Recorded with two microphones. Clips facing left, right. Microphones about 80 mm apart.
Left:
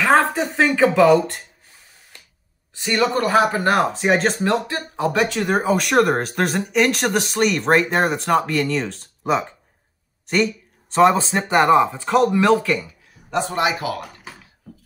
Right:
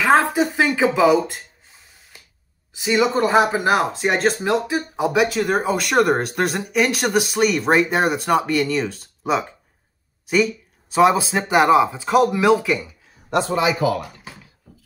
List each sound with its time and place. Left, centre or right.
0.0 s speech: centre
2.8 s speech: centre
4.5 s speech: centre
13.3 s a man's voice: right